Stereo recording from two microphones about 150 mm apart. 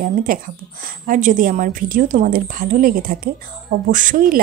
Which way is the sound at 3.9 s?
60° right (ahead or behind).